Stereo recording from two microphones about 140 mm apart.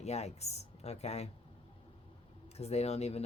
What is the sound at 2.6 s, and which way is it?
Speech, 50° left (ahead or behind).